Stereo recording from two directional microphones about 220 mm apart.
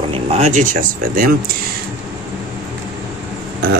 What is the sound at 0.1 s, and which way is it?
Speech, 30° right (ahead or behind).